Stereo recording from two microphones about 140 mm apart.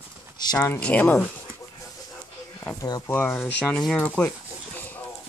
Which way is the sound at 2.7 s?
25° left (ahead or behind).